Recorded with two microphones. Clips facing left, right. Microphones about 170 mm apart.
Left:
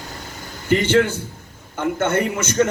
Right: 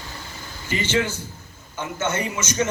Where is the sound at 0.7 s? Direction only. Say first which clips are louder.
Left 7 dB; 60° left (ahead or behind).